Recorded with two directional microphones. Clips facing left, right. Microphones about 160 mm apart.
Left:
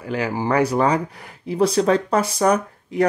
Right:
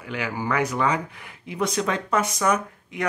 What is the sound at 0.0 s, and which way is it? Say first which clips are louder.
Speech: left 6 dB; 35° left (ahead or behind).